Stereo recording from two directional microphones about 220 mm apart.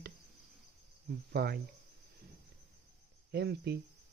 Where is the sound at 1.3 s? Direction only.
45° right (ahead or behind).